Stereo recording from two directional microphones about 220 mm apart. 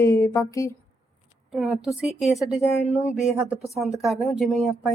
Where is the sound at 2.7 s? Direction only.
30° left (ahead or behind).